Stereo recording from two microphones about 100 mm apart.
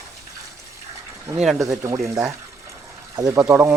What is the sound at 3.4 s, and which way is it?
Speech, 15° right (ahead or behind).